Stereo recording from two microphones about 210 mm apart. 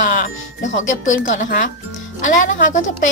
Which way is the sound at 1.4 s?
50° left (ahead or behind).